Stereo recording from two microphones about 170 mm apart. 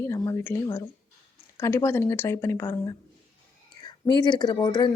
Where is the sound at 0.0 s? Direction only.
15° left (ahead or behind).